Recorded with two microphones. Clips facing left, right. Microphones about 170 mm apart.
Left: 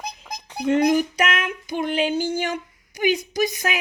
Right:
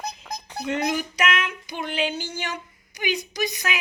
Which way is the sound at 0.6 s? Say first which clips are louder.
Left 8 dB; 45° left (ahead or behind).